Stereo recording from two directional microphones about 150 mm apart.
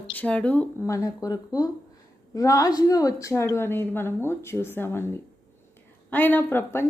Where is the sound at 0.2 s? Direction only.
10° left (ahead or behind).